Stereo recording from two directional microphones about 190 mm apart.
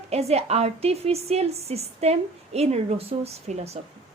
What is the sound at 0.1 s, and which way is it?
A woman's voice, 35° right (ahead or behind).